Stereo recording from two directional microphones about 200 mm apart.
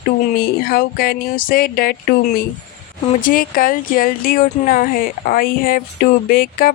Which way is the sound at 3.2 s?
45° left (ahead or behind).